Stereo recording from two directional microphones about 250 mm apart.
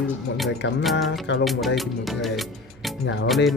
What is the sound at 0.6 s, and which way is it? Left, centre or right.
Speech, left.